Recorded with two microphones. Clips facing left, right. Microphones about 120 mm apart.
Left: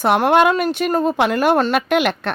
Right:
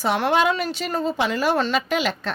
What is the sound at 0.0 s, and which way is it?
Speech, 55° left (ahead or behind).